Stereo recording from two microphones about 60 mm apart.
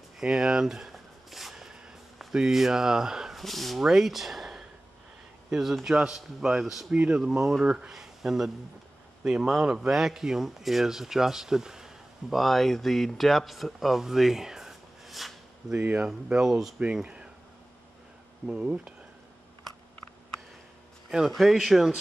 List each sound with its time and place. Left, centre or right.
0.2 s a sound: centre
5.5 s a man's voice: centre
15.8 s a man's voice: centre
18.5 s speech: centre
21.3 s speech: centre